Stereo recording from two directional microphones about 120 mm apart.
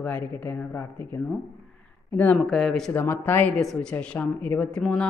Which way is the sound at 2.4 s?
Centre (ahead or behind).